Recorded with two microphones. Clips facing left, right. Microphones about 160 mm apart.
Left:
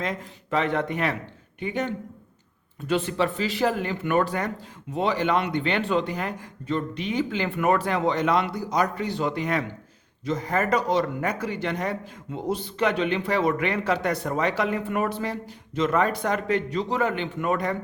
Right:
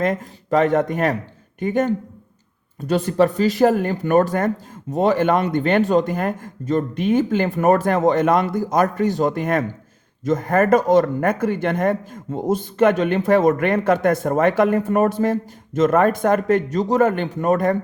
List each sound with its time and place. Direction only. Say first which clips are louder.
0.0 s speech: right 9 dB; 45° right (ahead or behind)